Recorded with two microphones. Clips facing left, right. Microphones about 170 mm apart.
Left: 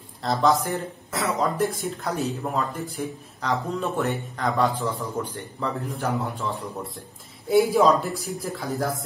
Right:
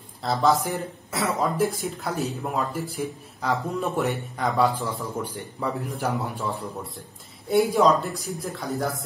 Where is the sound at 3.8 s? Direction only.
15° right (ahead or behind).